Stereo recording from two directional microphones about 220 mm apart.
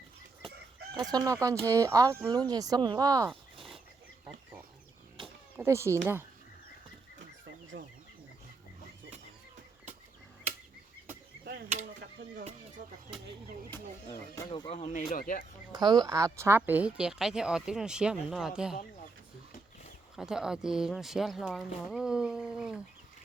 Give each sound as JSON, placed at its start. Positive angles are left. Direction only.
{"t": 1.0, "sound": "speech", "side_deg": -15}
{"t": 5.2, "sound": "a sound", "side_deg": -10}
{"t": 7.7, "sound": "chicken", "side_deg": -65}
{"t": 11.4, "sound": "a sound", "side_deg": -45}
{"t": 14.1, "sound": "speech", "side_deg": 15}
{"t": 15.1, "sound": "speech", "side_deg": 40}
{"t": 15.7, "sound": "speech", "side_deg": -20}
{"t": 20.1, "sound": "speech", "side_deg": -5}